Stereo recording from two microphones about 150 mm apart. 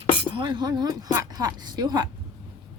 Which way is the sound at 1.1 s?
25° right (ahead or behind).